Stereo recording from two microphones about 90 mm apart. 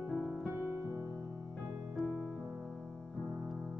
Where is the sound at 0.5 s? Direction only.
30° right (ahead or behind).